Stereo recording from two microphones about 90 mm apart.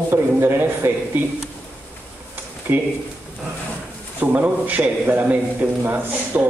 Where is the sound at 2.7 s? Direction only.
20° right (ahead or behind).